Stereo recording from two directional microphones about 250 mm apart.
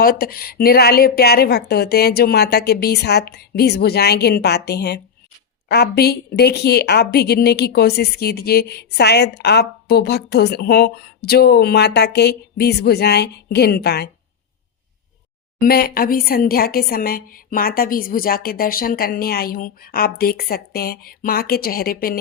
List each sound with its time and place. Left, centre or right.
0.0 s a woman's voice: left
15.6 s a woman's voice: left